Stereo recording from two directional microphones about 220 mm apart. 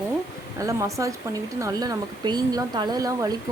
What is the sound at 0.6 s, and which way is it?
Speech, 15° right (ahead or behind).